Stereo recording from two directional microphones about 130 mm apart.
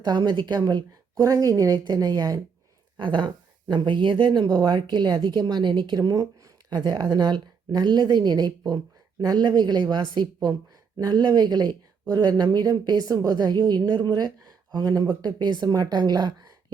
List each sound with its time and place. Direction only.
0.0 s a woman's voice: 30° right (ahead or behind)